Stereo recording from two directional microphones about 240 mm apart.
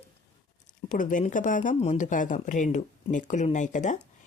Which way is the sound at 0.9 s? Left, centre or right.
Left.